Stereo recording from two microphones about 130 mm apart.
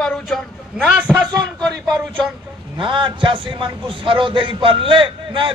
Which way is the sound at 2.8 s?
40° right (ahead or behind).